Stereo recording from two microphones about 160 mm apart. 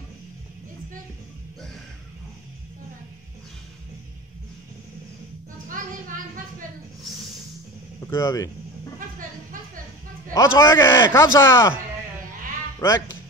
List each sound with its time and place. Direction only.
5.8 s a sound: 55° right (ahead or behind)
8.1 s speech: 20° left (ahead or behind)
10.3 s a man's voice: 20° left (ahead or behind)
12.8 s a man's voice: 15° left (ahead or behind)